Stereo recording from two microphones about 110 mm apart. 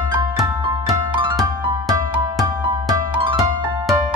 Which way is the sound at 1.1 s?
45° right (ahead or behind).